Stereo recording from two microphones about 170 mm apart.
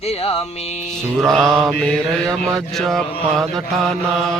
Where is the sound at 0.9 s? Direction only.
5° left (ahead or behind).